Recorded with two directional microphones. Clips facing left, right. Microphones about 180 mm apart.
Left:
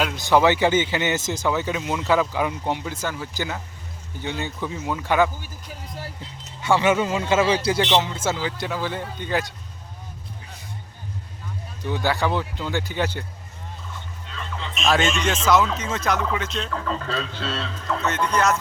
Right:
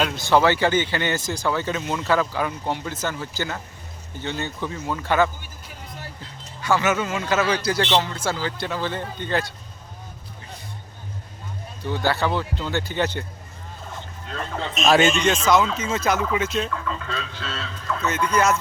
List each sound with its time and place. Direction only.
0.0 s speech: 15° left (ahead or behind)
6.6 s a man's voice: 25° left (ahead or behind)
7.8 s speech: 15° left (ahead or behind)
11.8 s speech: 15° left (ahead or behind)
14.3 s speech: 50° right (ahead or behind)
14.9 s speech: 5° right (ahead or behind)
16.7 s speech: 35° left (ahead or behind)
18.0 s speech: centre (ahead or behind)